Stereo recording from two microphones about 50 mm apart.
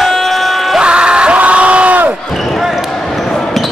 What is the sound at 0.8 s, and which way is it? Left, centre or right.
Crowd, centre.